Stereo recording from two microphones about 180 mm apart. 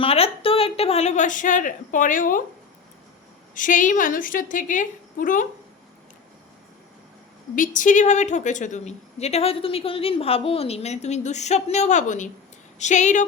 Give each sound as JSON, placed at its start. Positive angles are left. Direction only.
{"t": 0.0, "sound": "a woman's voice", "side_deg": 30}
{"t": 3.5, "sound": "a woman's voice", "side_deg": 45}
{"t": 7.5, "sound": "a woman's voice", "side_deg": 45}